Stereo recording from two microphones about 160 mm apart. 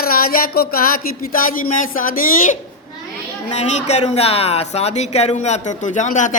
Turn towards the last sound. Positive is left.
turn(degrees=50)  # may be behind; listen again after turning